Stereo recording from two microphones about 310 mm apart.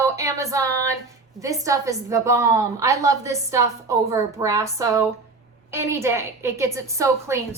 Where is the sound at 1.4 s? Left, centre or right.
Centre.